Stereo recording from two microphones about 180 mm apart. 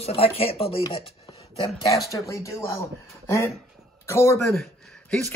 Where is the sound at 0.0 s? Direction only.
35° left (ahead or behind).